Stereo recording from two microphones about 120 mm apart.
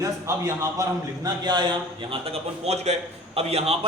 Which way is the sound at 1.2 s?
40° right (ahead or behind).